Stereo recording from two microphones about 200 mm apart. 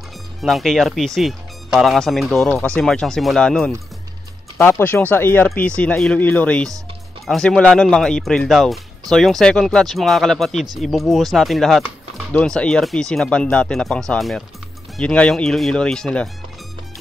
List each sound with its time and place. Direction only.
0.4 s speech: centre (ahead or behind)